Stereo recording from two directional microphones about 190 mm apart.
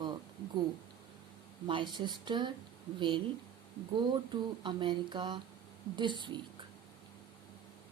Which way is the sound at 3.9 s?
25° right (ahead or behind).